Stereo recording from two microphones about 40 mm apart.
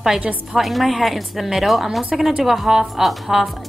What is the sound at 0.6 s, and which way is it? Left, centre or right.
A woman's voice, centre.